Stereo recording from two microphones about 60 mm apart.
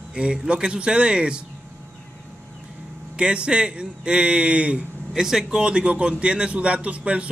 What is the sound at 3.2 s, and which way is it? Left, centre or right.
A man's voice, centre.